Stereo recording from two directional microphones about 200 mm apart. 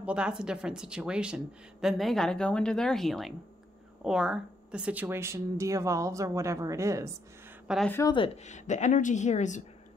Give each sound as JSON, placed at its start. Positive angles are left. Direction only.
{"t": 0.0, "sound": "speech", "side_deg": -5}
{"t": 7.6, "sound": "speech", "side_deg": 0}
{"t": 7.9, "sound": "speech", "side_deg": 20}
{"t": 8.5, "sound": "a woman's voice", "side_deg": 35}